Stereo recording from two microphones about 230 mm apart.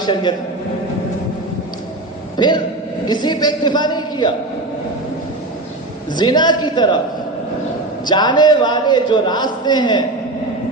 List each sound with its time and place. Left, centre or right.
0.0 s a man's voice: centre
2.3 s a man's voice: centre
6.1 s a man's voice: centre
8.0 s a man's voice: centre